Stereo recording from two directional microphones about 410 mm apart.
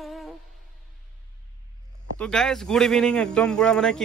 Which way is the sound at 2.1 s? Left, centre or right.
Centre.